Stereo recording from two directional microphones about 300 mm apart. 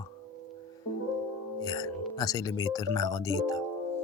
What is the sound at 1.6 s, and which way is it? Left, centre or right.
Speech, centre.